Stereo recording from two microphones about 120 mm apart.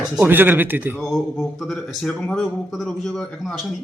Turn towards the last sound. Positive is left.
turn(degrees=5)  # may be behind; listen again after turning